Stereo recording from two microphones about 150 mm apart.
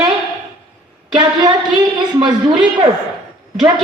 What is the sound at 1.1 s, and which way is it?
A woman's voice, 30° right (ahead or behind).